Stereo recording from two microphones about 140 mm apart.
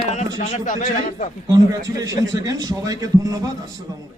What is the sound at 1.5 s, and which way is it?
A man's voice, 25° right (ahead or behind).